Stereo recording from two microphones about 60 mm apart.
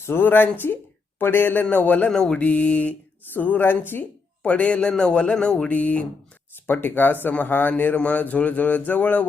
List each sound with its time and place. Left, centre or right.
0.0 s speech: left
2.0 s speech: centre; by 4.0 s left
4.4 s a man's voice: left
5.6 s speech: left